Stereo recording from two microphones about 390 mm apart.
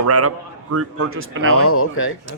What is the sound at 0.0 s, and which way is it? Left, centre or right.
Speech, right.